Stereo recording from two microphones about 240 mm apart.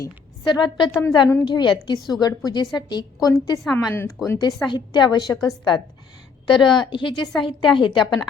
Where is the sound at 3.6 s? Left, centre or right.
Centre.